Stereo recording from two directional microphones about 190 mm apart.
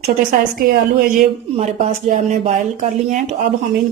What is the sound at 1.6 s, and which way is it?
Speech, 35° right (ahead or behind).